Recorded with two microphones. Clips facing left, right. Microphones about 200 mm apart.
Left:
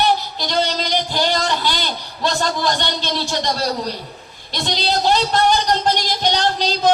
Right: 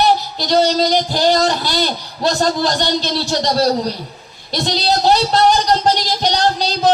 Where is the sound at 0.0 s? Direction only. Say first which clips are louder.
Right 3 dB; 40° right (ahead or behind).